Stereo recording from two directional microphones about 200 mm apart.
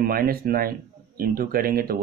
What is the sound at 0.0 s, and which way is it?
Speech, 45° right (ahead or behind).